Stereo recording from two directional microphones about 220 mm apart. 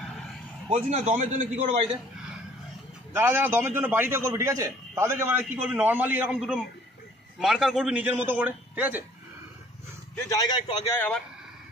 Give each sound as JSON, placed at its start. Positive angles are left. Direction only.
{"t": 0.7, "sound": "a man's voice", "side_deg": -30}
{"t": 3.2, "sound": "a man's voice", "side_deg": -10}
{"t": 10.1, "sound": "a man's voice", "side_deg": 15}
{"t": 11.0, "sound": "speech", "side_deg": 5}